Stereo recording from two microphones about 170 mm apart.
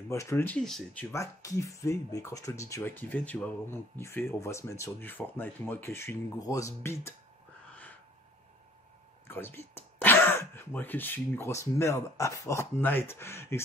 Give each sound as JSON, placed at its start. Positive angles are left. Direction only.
{"t": 0.1, "sound": "speech", "side_deg": 15}
{"t": 1.1, "sound": "speech", "side_deg": 20}
{"t": 9.3, "sound": "speech", "side_deg": 15}